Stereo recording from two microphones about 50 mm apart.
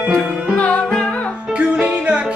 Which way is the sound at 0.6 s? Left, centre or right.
Left.